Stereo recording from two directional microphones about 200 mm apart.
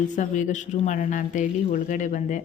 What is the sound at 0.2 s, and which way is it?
Speech, 35° left (ahead or behind).